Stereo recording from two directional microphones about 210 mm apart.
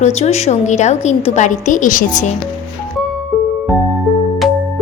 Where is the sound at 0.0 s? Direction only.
30° left (ahead or behind).